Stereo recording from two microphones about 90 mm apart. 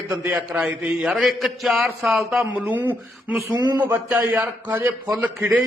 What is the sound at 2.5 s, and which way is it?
Speech, 20° right (ahead or behind).